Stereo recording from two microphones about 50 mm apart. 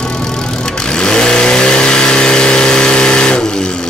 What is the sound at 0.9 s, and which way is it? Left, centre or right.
Vehicle, centre.